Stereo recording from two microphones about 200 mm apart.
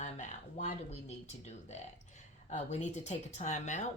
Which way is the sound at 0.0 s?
35° left (ahead or behind).